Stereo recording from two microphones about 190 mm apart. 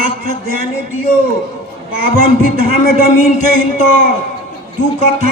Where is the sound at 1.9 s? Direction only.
50° right (ahead or behind).